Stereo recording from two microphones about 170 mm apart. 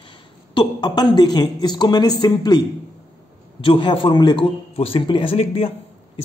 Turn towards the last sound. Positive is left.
turn(degrees=35)  # may be behind; listen again after turning